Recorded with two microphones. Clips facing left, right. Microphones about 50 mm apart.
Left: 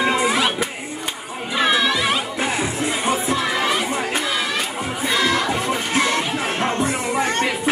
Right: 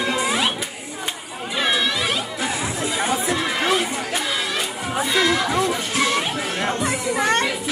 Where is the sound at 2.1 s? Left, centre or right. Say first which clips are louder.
Left 3 dB; left.